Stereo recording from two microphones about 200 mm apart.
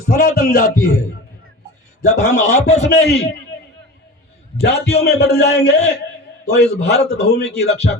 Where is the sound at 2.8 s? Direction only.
55° left (ahead or behind).